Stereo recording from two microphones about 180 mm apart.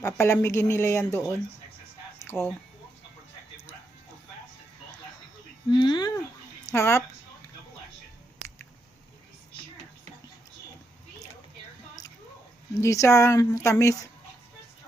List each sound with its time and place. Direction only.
0.0 s speech: 15° left (ahead or behind)
2.1 s a sound: 15° left (ahead or behind)
5.7 s speech: 25° left (ahead or behind)
12.7 s speech: 15° left (ahead or behind)